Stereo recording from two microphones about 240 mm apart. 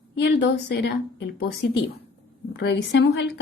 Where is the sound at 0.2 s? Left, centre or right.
Left.